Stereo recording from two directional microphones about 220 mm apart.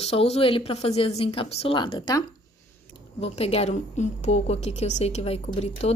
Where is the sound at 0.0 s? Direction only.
25° left (ahead or behind).